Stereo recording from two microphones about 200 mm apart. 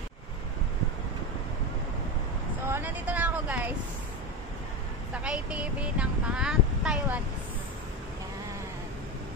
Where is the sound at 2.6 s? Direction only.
10° right (ahead or behind).